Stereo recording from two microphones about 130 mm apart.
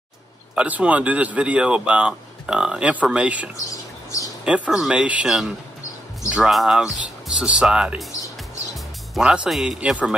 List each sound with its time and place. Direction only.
0.6 s speech: 10° right (ahead or behind)
3.7 s a sound: 25° left (ahead or behind)
4.5 s speech: 5° right (ahead or behind)